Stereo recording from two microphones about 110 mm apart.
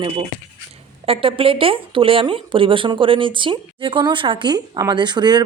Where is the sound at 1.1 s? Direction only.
55° right (ahead or behind).